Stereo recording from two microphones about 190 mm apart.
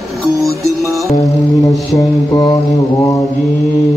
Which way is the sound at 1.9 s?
25° left (ahead or behind).